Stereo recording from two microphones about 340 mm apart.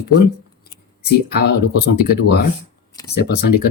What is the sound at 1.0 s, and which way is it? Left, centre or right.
Speech, left.